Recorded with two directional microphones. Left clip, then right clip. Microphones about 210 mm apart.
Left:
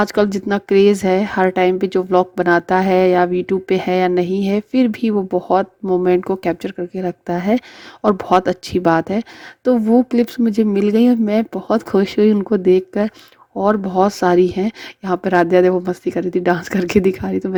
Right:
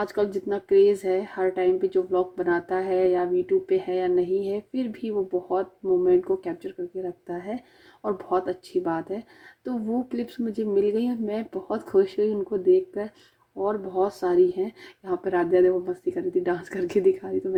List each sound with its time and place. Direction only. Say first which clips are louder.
0.0 s speech: left 9 dB; 40° left (ahead or behind)